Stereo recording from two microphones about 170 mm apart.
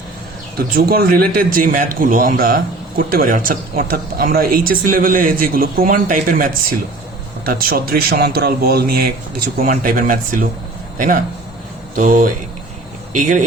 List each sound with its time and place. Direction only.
0.7 s a man's voice: 60° right (ahead or behind)